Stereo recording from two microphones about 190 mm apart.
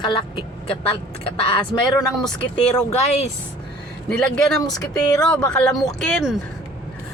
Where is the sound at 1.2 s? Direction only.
30° left (ahead or behind).